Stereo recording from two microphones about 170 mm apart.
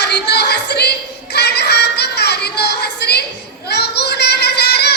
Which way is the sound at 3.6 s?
75° left (ahead or behind).